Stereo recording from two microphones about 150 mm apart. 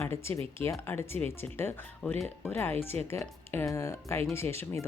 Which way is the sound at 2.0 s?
5° left (ahead or behind).